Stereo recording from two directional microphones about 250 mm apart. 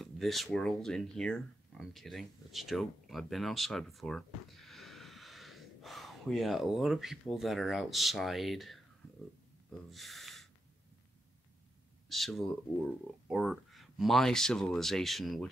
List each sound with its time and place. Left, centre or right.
0.0 s speech: centre
9.7 s a sound: centre
12.1 s speech: centre